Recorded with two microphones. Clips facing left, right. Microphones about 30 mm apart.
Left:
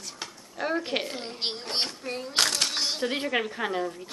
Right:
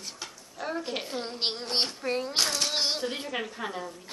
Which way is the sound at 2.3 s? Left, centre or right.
Left.